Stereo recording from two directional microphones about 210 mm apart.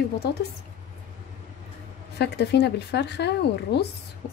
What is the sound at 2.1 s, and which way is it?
Speech, 55° left (ahead or behind).